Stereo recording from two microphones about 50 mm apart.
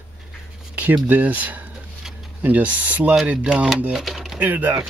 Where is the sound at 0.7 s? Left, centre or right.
Right.